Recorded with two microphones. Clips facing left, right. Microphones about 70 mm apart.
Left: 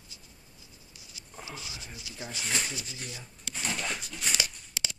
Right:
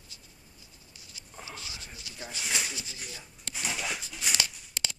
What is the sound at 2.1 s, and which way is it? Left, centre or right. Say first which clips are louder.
Speech: left 1 dB; centre.